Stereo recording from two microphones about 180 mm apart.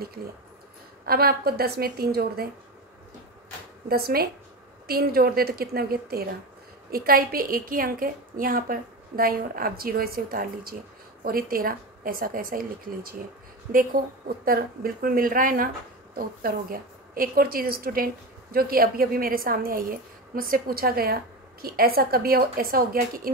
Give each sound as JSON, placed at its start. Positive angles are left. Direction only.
{"t": 1.0, "sound": "a woman's voice", "side_deg": -60}
{"t": 3.9, "sound": "a woman's voice", "side_deg": -55}